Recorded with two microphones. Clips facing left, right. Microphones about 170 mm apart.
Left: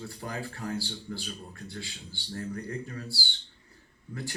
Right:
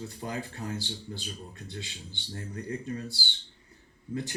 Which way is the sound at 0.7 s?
20° right (ahead or behind).